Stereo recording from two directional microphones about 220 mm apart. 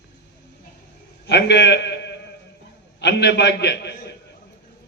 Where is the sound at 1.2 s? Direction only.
50° left (ahead or behind).